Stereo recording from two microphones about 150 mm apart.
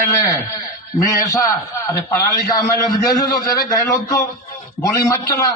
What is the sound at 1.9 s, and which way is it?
Speech, 25° left (ahead or behind).